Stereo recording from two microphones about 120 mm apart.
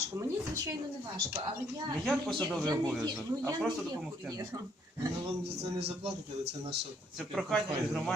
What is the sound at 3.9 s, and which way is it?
Speech, 30° right (ahead or behind).